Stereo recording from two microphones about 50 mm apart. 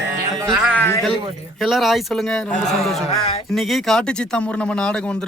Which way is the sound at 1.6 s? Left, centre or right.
Centre.